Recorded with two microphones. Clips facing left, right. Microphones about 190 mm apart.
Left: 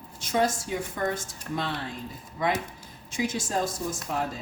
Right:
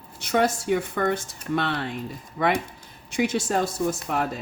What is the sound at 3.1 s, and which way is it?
Speech, 65° right (ahead or behind).